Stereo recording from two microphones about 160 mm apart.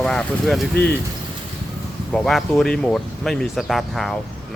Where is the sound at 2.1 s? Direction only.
Centre (ahead or behind).